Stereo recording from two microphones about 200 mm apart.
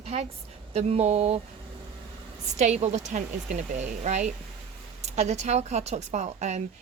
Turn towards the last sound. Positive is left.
turn(degrees=-35)  # may be behind; listen again after turning